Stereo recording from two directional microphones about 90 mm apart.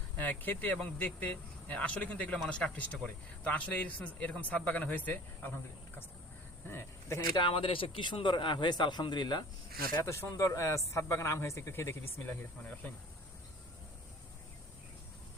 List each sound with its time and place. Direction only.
0.2 s a man's voice: 20° left (ahead or behind)
6.7 s speech: 25° left (ahead or behind)
7.3 s a man's voice: 70° left (ahead or behind); by 9.4 s 55° left (ahead or behind)
10.0 s speech: 30° left (ahead or behind)